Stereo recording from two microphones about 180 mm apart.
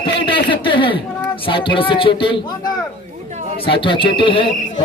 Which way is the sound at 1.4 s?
25° left (ahead or behind).